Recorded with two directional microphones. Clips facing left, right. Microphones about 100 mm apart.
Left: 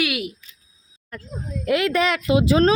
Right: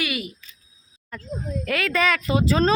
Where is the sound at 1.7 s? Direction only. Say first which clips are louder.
Left 3 dB; 15° left (ahead or behind).